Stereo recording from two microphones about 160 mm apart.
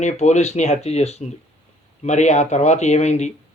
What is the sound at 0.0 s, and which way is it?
Speech, 45° left (ahead or behind).